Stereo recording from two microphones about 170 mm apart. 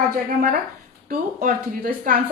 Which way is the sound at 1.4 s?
55° right (ahead or behind).